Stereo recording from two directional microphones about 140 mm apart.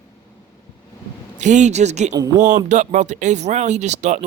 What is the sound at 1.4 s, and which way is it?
Speech, 60° right (ahead or behind).